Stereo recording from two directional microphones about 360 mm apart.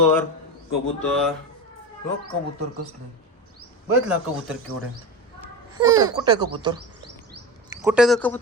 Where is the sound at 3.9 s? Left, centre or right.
Centre.